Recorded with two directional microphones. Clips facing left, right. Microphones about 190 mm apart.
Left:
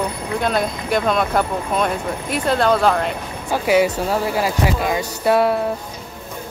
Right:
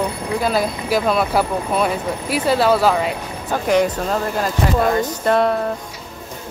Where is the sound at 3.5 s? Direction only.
5° left (ahead or behind).